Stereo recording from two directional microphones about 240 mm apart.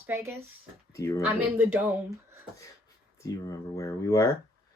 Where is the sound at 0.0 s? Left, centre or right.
Centre.